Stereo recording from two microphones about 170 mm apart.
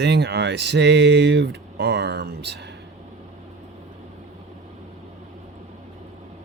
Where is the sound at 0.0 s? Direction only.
80° right.